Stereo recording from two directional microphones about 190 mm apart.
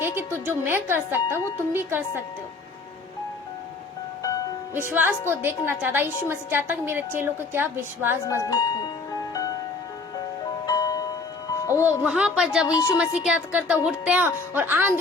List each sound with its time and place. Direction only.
0.3 s a woman's voice: 10° right (ahead or behind)
4.2 s music: 20° left (ahead or behind)
4.9 s a woman's voice: 10° right (ahead or behind)
8.4 s speech: 20° left (ahead or behind)
9.3 s music: 20° left (ahead or behind)
10.7 s music: 20° left (ahead or behind)
11.9 s a woman's voice: 5° right (ahead or behind)